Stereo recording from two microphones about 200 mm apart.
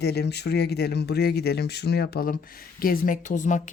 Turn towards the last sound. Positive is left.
turn(degrees=40)  # may be behind; listen again after turning